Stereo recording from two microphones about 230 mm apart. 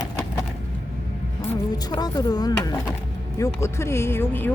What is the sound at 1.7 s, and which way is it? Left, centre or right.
Speech, centre.